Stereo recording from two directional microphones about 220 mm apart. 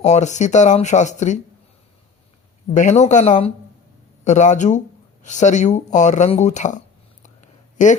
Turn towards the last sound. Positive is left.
turn(degrees=35)  # may be behind; listen again after turning